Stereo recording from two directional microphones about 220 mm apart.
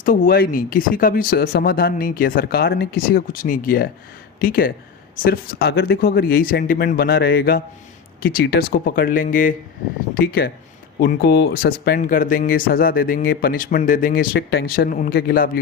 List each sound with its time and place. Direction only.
0.0 s speech: 40° left (ahead or behind)